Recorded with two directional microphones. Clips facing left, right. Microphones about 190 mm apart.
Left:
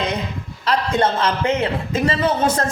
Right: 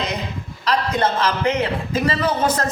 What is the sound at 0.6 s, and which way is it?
A man's voice, 30° left (ahead or behind).